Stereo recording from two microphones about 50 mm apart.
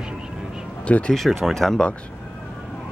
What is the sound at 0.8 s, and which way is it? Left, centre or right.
Speech, left.